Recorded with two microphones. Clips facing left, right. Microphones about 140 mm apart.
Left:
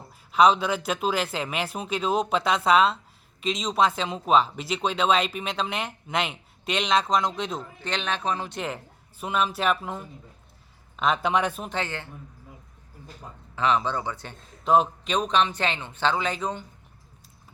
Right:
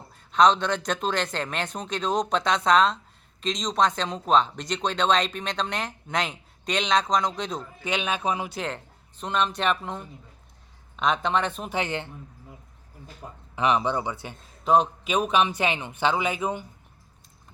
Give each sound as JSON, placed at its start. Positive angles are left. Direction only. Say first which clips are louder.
{"t": 0.3, "sound": "speech", "louder": "even", "side_deg": 5}
{"t": 7.8, "sound": "a man's voice", "louder": "right 3 dB", "side_deg": -10}
{"t": 8.5, "sound": "speech", "louder": "even", "side_deg": 5}
{"t": 11.7, "sound": "a man's voice", "louder": "right 3 dB", "side_deg": -15}
{"t": 13.6, "sound": "a man's voice", "louder": "right 1 dB", "side_deg": -15}
{"t": 14.6, "sound": "a man's voice", "louder": "even", "side_deg": 0}